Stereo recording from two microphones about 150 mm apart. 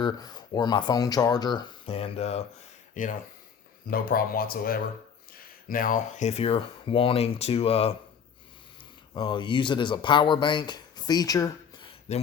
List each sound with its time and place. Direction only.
0.0 s speech: 30° left (ahead or behind); by 2.4 s 45° left (ahead or behind)
2.9 s speech: 60° left (ahead or behind)
3.8 s speech: 75° left (ahead or behind)
5.6 s speech: 65° left (ahead or behind); by 7.9 s 40° left (ahead or behind)
9.1 s speech: 35° left (ahead or behind)
11.9 s a sound: 45° left (ahead or behind)